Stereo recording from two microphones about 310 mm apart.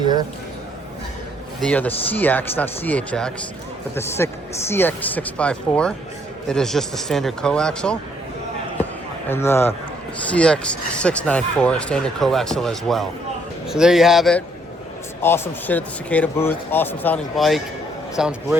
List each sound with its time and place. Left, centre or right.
0.0 s a sound: centre
1.6 s a man's voice: centre
9.3 s a man's voice: centre